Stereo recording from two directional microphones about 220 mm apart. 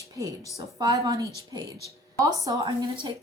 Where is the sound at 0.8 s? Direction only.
15° right (ahead or behind).